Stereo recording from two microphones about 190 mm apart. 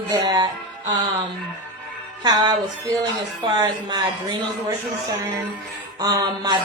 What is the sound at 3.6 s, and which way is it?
Speech, 20° right (ahead or behind).